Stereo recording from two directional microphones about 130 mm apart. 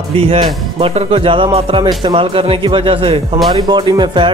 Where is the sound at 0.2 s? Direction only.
45° right (ahead or behind).